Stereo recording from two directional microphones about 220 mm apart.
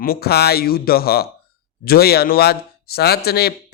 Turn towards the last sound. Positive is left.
turn(degrees=45)  # may be behind; listen again after turning